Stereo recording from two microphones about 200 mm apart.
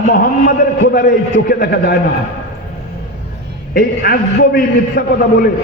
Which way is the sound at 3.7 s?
45° left (ahead or behind).